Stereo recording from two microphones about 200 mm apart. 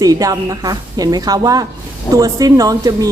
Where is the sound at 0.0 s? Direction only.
15° right (ahead or behind).